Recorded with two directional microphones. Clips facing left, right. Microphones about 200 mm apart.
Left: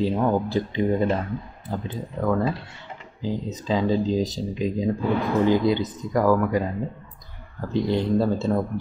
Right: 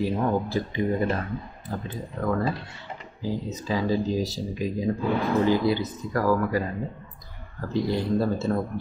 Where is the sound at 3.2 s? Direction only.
20° left (ahead or behind).